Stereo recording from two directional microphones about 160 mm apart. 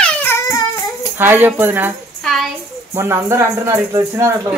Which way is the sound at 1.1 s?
15° right (ahead or behind).